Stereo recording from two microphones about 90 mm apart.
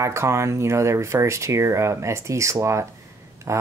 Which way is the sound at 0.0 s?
35° right (ahead or behind).